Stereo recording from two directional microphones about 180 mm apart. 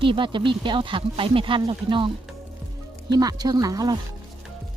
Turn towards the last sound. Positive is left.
turn(degrees=-20)  # may be behind; listen again after turning